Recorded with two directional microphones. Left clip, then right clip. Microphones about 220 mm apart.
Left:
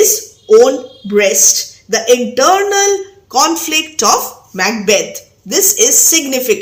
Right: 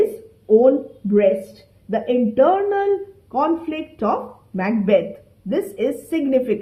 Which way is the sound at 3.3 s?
25° left (ahead or behind).